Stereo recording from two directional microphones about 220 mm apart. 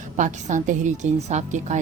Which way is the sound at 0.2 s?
35° right (ahead or behind).